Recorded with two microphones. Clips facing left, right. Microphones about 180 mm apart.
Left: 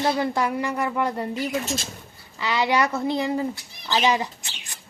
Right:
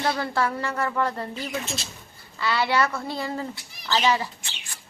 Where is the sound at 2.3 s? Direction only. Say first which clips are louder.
Left 1 dB; 15° left (ahead or behind).